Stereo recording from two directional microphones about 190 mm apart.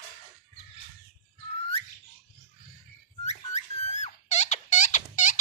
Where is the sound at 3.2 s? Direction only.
40° left (ahead or behind).